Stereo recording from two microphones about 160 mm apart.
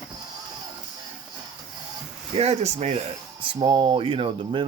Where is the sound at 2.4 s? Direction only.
40° right (ahead or behind).